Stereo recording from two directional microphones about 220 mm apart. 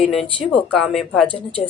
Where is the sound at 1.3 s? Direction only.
25° left (ahead or behind).